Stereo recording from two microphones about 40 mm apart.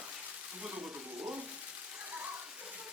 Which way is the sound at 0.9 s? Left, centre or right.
Right.